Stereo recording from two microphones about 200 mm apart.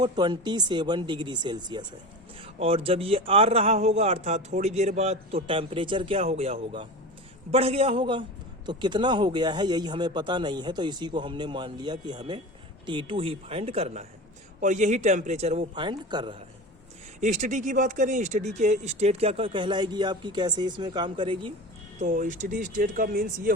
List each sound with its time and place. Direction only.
0.0 s a man's voice: 20° right (ahead or behind)
17.2 s speech: 35° right (ahead or behind)
21.9 s speech: 40° right (ahead or behind)